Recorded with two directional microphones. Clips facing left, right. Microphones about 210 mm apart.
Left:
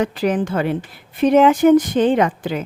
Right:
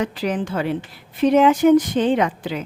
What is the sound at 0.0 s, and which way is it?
Speech, 50° left (ahead or behind).